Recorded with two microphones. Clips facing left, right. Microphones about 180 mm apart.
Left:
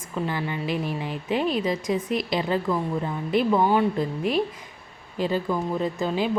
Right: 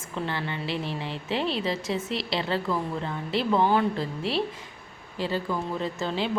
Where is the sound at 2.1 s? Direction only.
50° left (ahead or behind).